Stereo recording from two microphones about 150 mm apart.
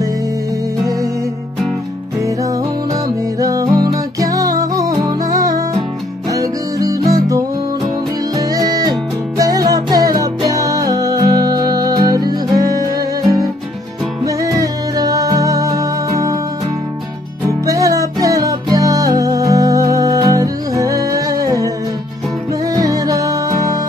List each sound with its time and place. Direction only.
2.9 s music: 25° right (ahead or behind)
17.5 s music: 20° right (ahead or behind)
22.7 s music: 25° right (ahead or behind)